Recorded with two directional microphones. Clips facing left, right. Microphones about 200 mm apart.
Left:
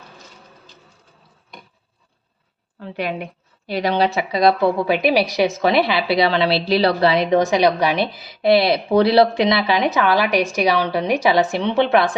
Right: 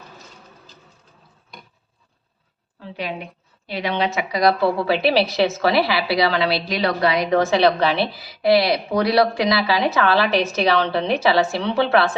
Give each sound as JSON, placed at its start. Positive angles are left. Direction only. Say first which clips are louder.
{"t": 2.8, "sound": "a woman's voice", "louder": "left 4 dB", "side_deg": 55}
{"t": 3.7, "sound": "a woman's voice", "louder": "left 4 dB", "side_deg": 40}